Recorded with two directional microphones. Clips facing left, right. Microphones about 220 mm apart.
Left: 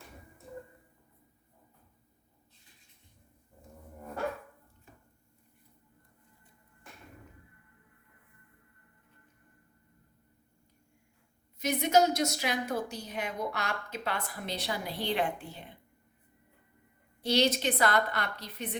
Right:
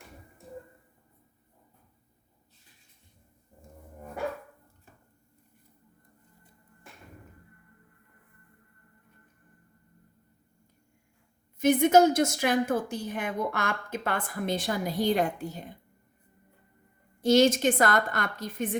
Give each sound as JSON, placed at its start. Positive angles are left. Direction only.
{"t": 11.6, "sound": "a woman's voice", "side_deg": -50}
{"t": 17.2, "sound": "a woman's voice", "side_deg": -45}